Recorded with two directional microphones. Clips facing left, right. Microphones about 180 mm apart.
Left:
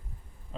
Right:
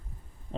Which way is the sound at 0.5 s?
30° right (ahead or behind).